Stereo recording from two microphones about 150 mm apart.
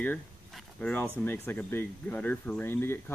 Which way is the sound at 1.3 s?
15° left (ahead or behind).